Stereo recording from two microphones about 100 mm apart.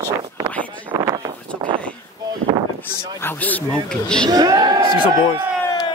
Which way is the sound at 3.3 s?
15° left (ahead or behind).